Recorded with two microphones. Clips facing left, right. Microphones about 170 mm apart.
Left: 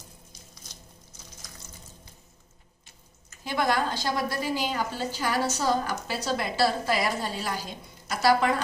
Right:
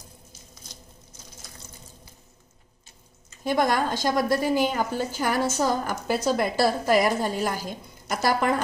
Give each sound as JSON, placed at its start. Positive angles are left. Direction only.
{"t": 3.4, "sound": "a woman's voice", "side_deg": -45}